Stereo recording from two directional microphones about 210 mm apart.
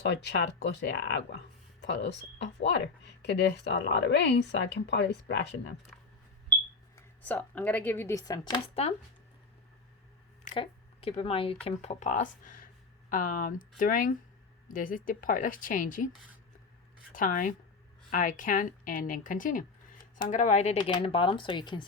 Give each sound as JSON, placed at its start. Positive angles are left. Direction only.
{"t": 0.0, "sound": "speech", "side_deg": 55}
{"t": 5.9, "sound": "smoke detector", "side_deg": 5}
{"t": 6.9, "sound": "speech", "side_deg": 10}
{"t": 10.5, "sound": "a woman's voice", "side_deg": 25}
{"t": 17.1, "sound": "a woman's voice", "side_deg": 40}